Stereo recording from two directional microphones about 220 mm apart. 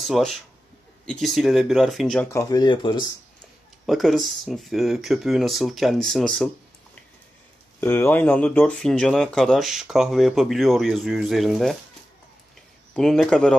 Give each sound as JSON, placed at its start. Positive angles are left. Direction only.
{"t": 0.0, "sound": "speech", "side_deg": 0}
{"t": 2.2, "sound": "speech", "side_deg": 15}
{"t": 3.8, "sound": "speech", "side_deg": 0}
{"t": 7.8, "sound": "speech", "side_deg": 10}
{"t": 12.9, "sound": "speech", "side_deg": 0}